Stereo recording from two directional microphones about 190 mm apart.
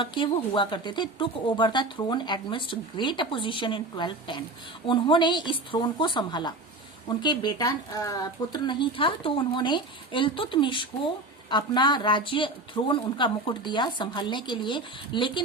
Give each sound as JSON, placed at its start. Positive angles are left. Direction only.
{"t": 0.0, "sound": "speech", "side_deg": 25}